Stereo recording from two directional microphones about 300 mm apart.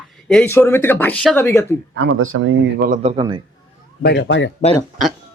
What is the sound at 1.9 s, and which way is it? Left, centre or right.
Speech, right.